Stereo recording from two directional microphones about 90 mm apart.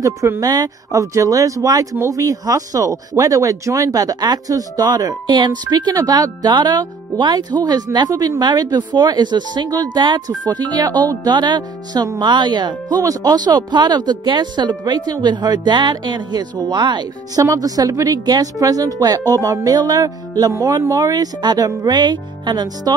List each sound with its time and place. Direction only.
0.0 s speech: 35° right (ahead or behind); by 13.0 s 55° right (ahead or behind)
13.0 s speech: 45° right (ahead or behind)
17.4 s speech: 40° right (ahead or behind)